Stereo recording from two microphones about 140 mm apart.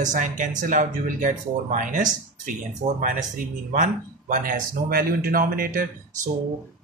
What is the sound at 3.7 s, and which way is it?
Speech, 65° right (ahead or behind).